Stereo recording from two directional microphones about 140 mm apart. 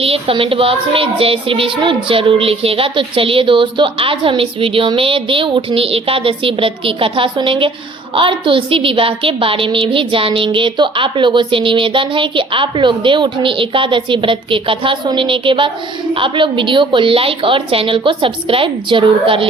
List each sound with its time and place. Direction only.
0.0 s child singing: 40° right (ahead or behind)